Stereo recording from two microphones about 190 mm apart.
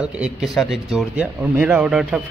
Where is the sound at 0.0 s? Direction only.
Centre (ahead or behind).